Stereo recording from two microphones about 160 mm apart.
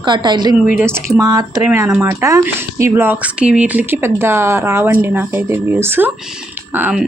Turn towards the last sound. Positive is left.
turn(degrees=-15)  # may be behind; listen again after turning